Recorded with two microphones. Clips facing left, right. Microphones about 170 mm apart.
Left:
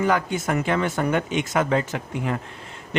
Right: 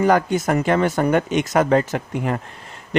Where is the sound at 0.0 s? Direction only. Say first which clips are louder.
Right 5 dB; 40° right (ahead or behind).